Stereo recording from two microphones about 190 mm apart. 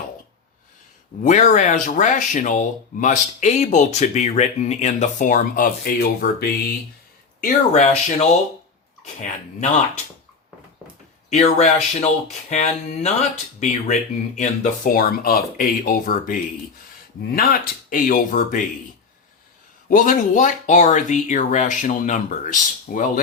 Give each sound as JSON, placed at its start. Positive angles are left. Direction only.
{"t": 1.2, "sound": "speech", "side_deg": 40}
{"t": 7.4, "sound": "speech", "side_deg": 35}
{"t": 11.3, "sound": "speech", "side_deg": 40}
{"t": 19.9, "sound": "speech", "side_deg": 45}